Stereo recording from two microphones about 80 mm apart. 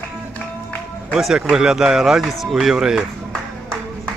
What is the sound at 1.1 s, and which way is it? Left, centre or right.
Speech, centre.